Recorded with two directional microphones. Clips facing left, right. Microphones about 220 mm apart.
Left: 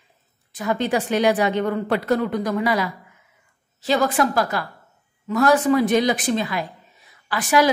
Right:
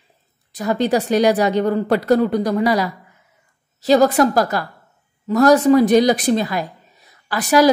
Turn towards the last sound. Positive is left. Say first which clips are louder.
# right 4 dB
turn(degrees=-40)  # may be behind; listen again after turning